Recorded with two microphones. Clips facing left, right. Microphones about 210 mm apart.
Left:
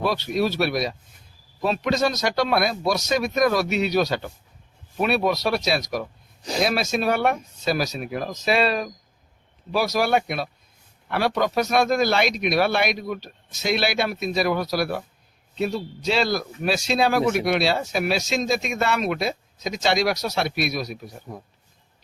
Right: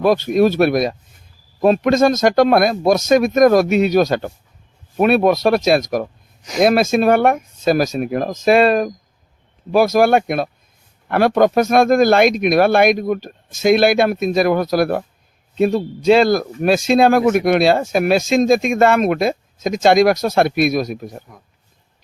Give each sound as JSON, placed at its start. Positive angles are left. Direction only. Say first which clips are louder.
{"t": 0.0, "sound": "speech", "louder": "right 9 dB", "side_deg": -50}